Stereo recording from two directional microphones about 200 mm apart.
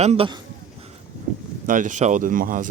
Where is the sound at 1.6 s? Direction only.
40° right (ahead or behind).